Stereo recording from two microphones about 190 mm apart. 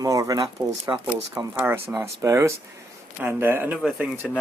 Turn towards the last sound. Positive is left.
turn(degrees=-5)  # may be behind; listen again after turning